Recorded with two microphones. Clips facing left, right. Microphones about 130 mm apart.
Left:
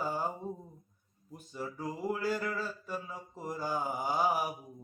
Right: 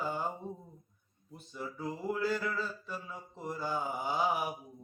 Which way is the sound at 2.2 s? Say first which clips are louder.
Even; 10° left (ahead or behind).